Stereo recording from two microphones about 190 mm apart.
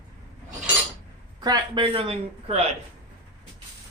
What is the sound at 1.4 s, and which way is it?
Speech, 25° right (ahead or behind).